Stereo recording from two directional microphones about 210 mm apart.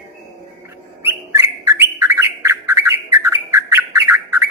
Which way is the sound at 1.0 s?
15° right (ahead or behind).